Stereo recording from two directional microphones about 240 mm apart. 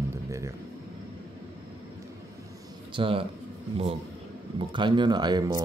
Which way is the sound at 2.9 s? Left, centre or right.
Right.